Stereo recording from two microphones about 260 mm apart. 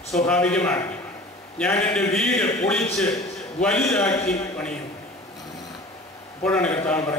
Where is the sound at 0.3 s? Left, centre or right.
Centre.